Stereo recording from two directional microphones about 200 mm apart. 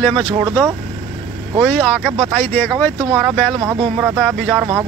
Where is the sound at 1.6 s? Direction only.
5° left (ahead or behind).